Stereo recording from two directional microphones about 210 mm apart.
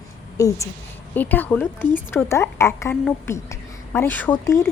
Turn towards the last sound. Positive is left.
turn(degrees=15)  # may be behind; listen again after turning